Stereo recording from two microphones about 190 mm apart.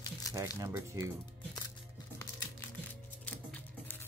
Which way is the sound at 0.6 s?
15° right (ahead or behind).